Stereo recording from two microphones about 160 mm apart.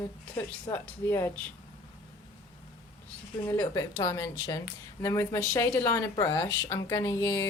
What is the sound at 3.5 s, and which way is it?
A woman's voice, 20° left (ahead or behind).